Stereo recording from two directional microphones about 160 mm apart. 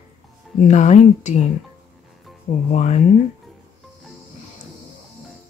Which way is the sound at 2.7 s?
45° left (ahead or behind).